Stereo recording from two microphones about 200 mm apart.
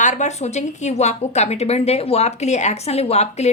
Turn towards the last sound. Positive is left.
turn(degrees=30)  # may be behind; listen again after turning